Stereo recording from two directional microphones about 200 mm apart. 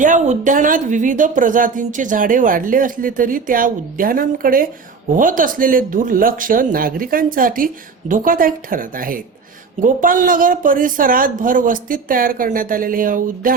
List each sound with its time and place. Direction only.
0.0 s speech: 40° right (ahead or behind)